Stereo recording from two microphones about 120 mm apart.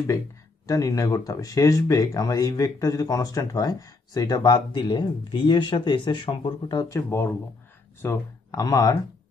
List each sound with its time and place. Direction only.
0.7 s speech: 30° left (ahead or behind)
7.1 s speech: 20° left (ahead or behind)